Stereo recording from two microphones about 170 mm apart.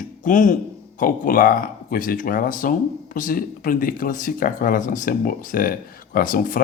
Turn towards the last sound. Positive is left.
turn(degrees=55)  # may be behind; listen again after turning